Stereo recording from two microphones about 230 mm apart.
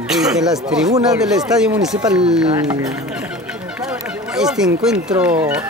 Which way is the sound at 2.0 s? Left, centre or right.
Centre.